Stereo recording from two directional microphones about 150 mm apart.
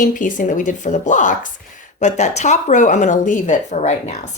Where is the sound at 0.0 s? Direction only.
60° left (ahead or behind).